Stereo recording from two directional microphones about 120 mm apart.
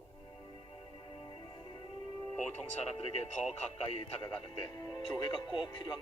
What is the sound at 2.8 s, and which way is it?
Speech, 55° left (ahead or behind).